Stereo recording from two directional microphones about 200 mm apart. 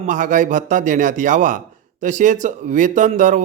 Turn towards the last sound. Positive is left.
turn(degrees=-40)  # may be behind; listen again after turning